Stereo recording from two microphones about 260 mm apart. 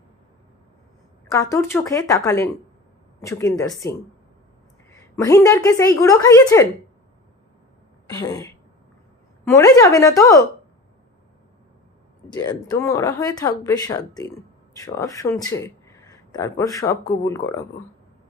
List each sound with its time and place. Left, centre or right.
1.3 s speech: centre
8.1 s speech: centre
12.3 s speech: centre